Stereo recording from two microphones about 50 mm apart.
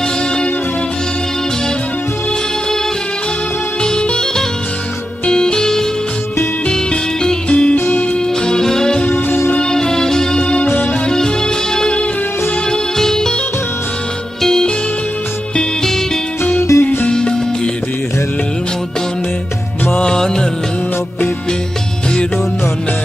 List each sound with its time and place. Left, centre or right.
3.8 s music: centre
7.7 s music: left
8.5 s music: centre
10.4 s music: left
14.4 s music: centre
16.7 s music: left
17.1 s music: centre
20.0 s music of bollywood: centre